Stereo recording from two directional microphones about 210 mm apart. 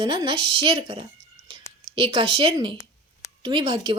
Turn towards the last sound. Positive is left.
turn(degrees=-20)  # may be behind; listen again after turning